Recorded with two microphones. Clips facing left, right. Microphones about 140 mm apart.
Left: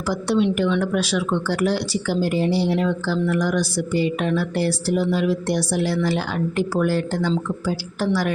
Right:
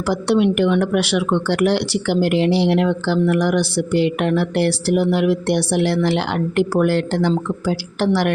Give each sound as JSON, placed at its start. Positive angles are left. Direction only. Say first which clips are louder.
{"t": 0.1, "sound": "speech", "louder": "right 3 dB", "side_deg": -65}